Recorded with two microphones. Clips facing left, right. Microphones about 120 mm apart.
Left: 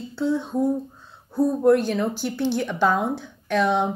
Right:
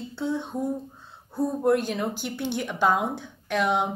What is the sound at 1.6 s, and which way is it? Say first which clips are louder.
A woman's voice: left 4 dB; 20° right (ahead or behind).